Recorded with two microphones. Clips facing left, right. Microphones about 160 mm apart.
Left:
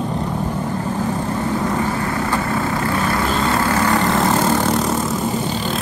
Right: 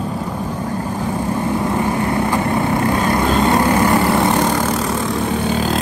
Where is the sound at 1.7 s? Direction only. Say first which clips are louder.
Right 3 dB; 20° right (ahead or behind).